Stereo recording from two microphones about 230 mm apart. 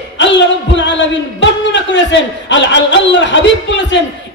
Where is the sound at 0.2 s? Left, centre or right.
Left.